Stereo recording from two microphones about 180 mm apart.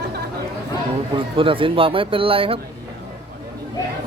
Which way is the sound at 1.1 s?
30° right (ahead or behind).